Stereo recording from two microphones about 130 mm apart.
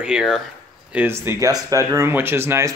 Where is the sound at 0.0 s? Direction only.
5° right (ahead or behind).